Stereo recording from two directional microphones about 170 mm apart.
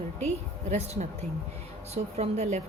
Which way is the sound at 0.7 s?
40° right (ahead or behind).